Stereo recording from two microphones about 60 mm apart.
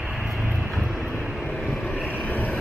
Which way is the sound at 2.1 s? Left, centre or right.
Left.